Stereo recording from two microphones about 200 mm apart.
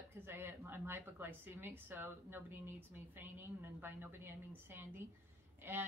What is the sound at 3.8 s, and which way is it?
Speech, 10° right (ahead or behind).